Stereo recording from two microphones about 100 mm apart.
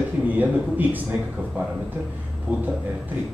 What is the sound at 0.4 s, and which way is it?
Speech, 15° right (ahead or behind).